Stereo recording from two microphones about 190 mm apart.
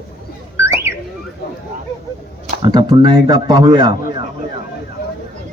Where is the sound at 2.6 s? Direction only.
20° right (ahead or behind).